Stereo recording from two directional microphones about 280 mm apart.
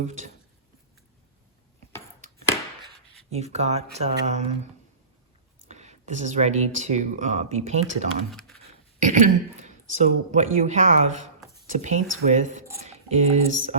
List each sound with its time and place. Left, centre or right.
0.0 s speech: right
2.2 s a sound: right
3.2 s speech: right
5.6 s speech: right
8.3 s speech: centre
9.0 s speech: right